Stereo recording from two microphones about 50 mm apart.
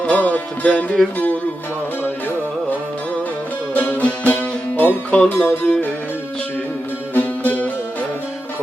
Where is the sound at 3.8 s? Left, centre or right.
Left.